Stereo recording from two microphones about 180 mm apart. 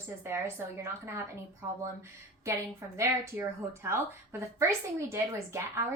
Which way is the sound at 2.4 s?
15° right (ahead or behind).